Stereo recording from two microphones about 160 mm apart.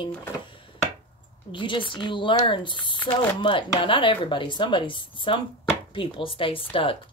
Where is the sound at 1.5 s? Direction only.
30° left (ahead or behind).